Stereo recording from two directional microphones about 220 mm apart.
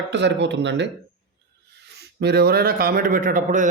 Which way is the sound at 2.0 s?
45° right (ahead or behind).